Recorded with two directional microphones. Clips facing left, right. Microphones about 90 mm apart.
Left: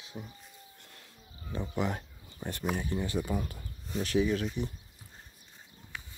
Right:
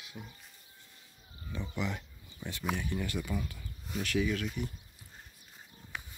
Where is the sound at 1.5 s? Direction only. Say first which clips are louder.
Left 4 dB; 45° left (ahead or behind).